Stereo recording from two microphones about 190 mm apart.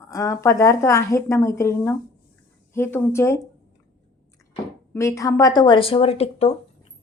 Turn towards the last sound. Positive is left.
turn(degrees=30)  # may be behind; listen again after turning